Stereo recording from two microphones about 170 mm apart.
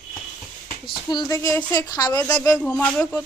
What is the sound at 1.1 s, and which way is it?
Speech, 25° left (ahead or behind).